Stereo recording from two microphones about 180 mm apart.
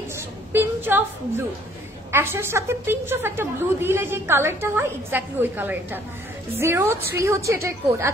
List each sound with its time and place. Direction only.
0.5 s a woman's voice: 10° right (ahead or behind)